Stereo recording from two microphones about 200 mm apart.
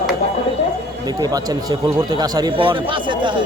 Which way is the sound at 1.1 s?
20° right (ahead or behind).